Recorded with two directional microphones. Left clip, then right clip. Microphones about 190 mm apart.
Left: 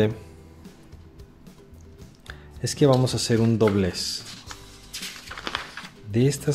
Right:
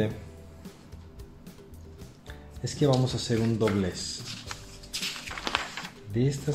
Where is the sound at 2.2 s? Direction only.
55° left (ahead or behind).